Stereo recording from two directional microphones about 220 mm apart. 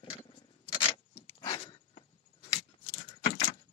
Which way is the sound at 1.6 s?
25° left (ahead or behind).